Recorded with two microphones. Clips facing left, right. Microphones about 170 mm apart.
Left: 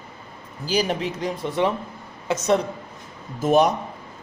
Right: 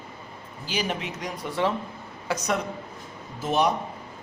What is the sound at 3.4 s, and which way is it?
Speech, 45° left (ahead or behind).